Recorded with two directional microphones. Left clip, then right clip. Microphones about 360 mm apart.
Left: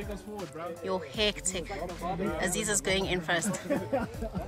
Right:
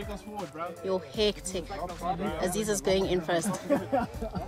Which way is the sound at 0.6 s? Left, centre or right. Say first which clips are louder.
Right 2 dB; centre.